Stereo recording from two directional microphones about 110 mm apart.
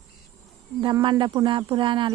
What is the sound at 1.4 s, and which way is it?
Speech, 45° right (ahead or behind).